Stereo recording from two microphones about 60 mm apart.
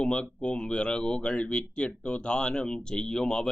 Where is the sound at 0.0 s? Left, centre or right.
Centre.